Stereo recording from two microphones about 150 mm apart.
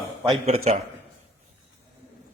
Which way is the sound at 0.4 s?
45° right (ahead or behind).